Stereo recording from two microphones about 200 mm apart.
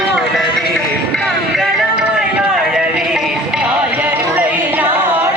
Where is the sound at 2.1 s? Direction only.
5° right (ahead or behind).